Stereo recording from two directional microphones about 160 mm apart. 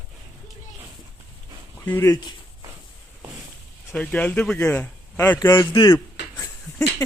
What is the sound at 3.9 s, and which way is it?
Speech, 10° left (ahead or behind).